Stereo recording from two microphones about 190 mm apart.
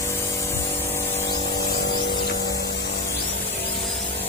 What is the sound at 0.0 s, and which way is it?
Spray, 15° left (ahead or behind).